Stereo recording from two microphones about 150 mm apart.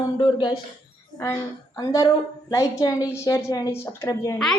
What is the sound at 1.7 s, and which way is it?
A woman's voice, 25° left (ahead or behind).